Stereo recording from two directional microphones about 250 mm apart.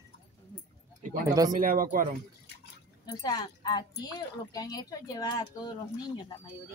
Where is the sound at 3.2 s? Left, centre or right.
Centre.